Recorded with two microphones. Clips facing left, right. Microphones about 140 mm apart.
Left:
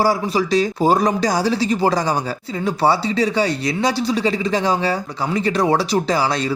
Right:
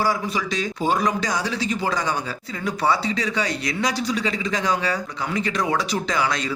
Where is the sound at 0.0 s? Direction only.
35° left (ahead or behind).